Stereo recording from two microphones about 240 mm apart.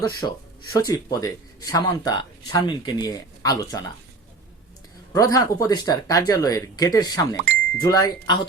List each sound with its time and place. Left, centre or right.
0.2 s speech: centre
5.1 s speech: centre